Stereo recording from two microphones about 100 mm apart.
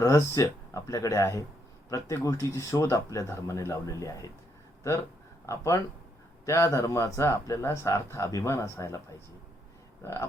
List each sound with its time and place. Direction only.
0.0 s speech: 30° left (ahead or behind)
5.5 s speech: 30° left (ahead or behind)
10.0 s speech: 30° left (ahead or behind)